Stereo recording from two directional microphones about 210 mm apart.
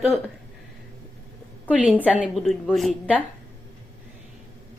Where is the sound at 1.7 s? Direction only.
5° right (ahead or behind).